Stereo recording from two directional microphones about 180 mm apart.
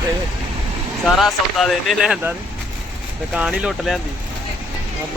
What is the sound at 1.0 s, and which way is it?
Speech, centre (ahead or behind).